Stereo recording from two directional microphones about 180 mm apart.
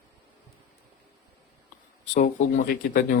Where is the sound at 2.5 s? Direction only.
50° left (ahead or behind).